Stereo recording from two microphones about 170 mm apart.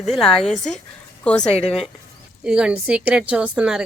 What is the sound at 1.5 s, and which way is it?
Speech, 35° left (ahead or behind).